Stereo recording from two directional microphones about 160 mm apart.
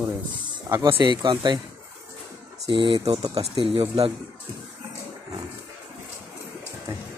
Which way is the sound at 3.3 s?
35° right (ahead or behind).